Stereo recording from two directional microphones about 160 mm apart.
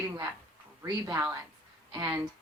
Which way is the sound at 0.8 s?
20° right (ahead or behind).